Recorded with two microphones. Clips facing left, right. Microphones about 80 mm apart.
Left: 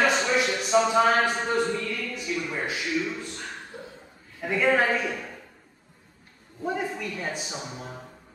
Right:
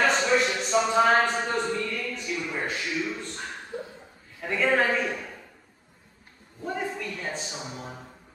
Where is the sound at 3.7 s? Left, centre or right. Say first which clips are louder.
Right 5 dB; right.